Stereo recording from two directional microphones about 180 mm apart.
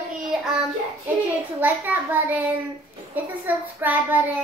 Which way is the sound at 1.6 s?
10° right (ahead or behind).